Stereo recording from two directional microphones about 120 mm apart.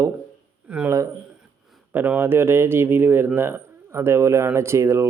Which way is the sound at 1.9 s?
15° right (ahead or behind).